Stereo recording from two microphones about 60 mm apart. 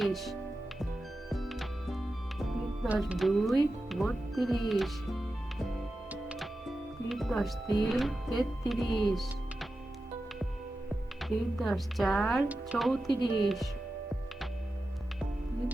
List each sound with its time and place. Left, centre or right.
0.0 s speech: centre
1.3 s music: centre
3.2 s speech: centre
11.2 s a woman's voice: centre
12.5 s speech: right
12.8 s a woman's voice: centre